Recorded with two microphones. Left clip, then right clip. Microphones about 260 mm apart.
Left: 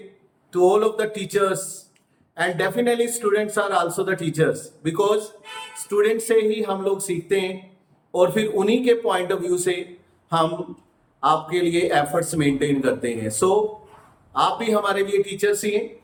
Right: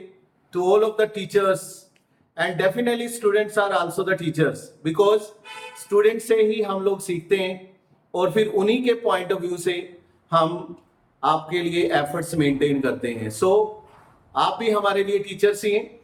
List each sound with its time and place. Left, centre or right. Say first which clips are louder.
0.5 s a man's voice: left 1 dB; centre
11.2 s a man's voice: left 2 dB; centre